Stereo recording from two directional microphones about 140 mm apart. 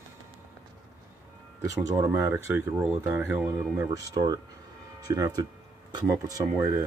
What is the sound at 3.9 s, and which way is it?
Speech, 30° right (ahead or behind).